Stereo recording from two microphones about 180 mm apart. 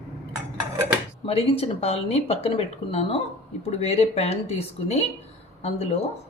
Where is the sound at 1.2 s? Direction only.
35° left (ahead or behind).